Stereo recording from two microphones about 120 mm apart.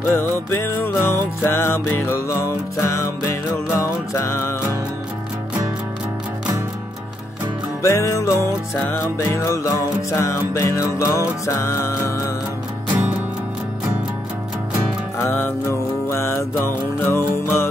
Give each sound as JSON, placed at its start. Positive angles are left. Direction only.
{"t": 0.1, "sound": "music", "side_deg": 20}
{"t": 7.8, "sound": "music", "side_deg": 25}
{"t": 15.1, "sound": "music", "side_deg": 20}